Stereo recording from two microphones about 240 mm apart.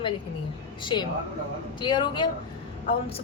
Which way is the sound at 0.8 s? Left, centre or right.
Centre.